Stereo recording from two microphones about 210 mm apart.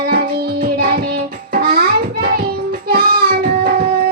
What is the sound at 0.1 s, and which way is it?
Music, 50° right (ahead or behind).